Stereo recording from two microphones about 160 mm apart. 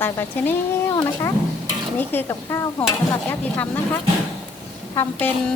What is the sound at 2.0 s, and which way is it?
Speech, 15° left (ahead or behind).